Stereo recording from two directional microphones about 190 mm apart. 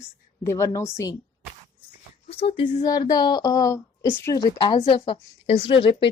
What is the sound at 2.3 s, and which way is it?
Speech, 30° left (ahead or behind).